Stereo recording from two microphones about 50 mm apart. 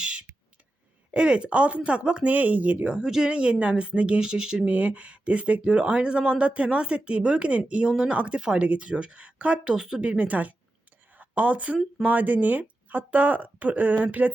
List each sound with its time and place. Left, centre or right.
1.1 s speech: right
2.3 s speech: right
2.8 s speech: centre
9.7 s a woman's voice: centre; by 14.3 s right